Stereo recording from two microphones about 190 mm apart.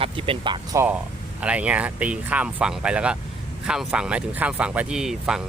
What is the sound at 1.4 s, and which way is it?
Speech, 5° right (ahead or behind).